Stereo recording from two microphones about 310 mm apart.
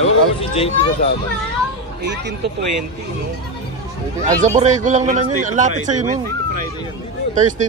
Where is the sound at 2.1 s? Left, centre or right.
Right.